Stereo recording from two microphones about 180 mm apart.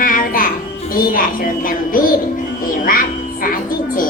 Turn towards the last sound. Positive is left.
turn(degrees=50)  # may be behind; listen again after turning